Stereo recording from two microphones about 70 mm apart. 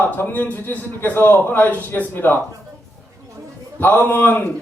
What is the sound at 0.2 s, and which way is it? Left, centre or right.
A man's voice, left.